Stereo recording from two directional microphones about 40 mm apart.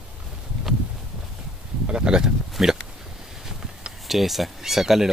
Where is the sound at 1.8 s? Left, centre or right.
Right.